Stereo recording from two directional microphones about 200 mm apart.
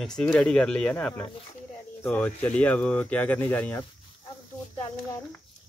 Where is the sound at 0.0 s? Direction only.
5° left (ahead or behind).